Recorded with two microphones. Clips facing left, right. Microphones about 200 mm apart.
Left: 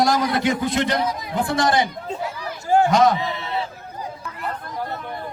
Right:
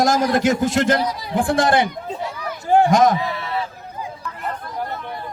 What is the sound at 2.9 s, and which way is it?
Speech, 50° right (ahead or behind).